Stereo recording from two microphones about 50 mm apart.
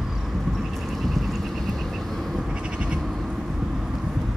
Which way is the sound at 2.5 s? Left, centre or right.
Right.